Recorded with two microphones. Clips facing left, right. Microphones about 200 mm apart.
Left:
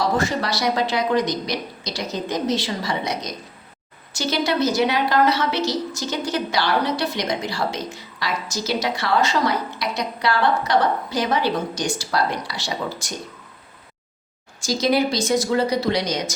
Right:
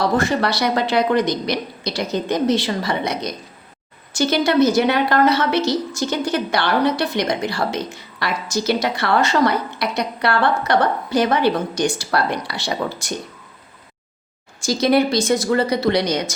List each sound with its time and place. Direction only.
0.0 s a woman's voice: 60° right (ahead or behind)
14.6 s a woman's voice: 60° right (ahead or behind)